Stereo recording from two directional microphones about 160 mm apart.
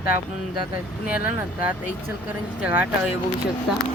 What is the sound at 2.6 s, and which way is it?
Speech, 10° right (ahead or behind).